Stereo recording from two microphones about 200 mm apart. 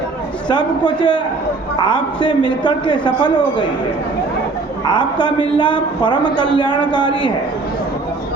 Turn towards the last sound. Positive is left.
turn(degrees=20)  # may be behind; listen again after turning